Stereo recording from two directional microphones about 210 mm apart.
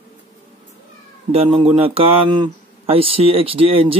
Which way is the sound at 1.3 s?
25° right (ahead or behind).